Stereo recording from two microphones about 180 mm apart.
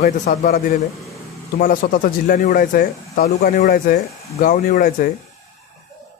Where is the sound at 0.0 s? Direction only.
45° left (ahead or behind).